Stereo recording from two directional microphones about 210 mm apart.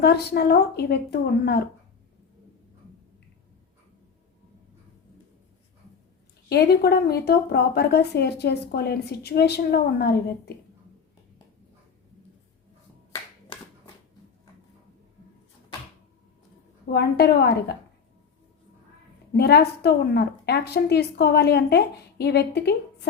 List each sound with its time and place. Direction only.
0.0 s a woman's voice: 50° left (ahead or behind)
6.5 s a woman's voice: 50° left (ahead or behind)
16.9 s a woman's voice: 50° left (ahead or behind)
19.3 s a woman's voice: 50° left (ahead or behind)